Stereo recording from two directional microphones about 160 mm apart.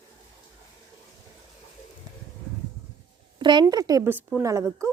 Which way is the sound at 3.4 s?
30° right (ahead or behind).